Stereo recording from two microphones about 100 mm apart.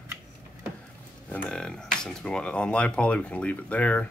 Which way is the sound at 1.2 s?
15° left (ahead or behind).